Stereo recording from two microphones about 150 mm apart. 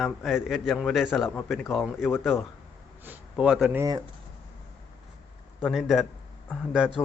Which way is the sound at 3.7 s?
25° right (ahead or behind).